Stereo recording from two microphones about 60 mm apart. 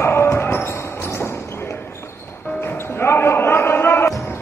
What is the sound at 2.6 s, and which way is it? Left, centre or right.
Basketball bounce, left.